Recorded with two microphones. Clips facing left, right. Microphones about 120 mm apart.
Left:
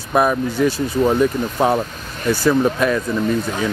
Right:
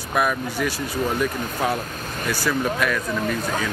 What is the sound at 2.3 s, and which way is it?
Speech, 25° left (ahead or behind).